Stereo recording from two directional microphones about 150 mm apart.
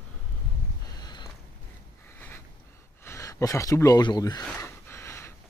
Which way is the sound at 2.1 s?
15° left (ahead or behind).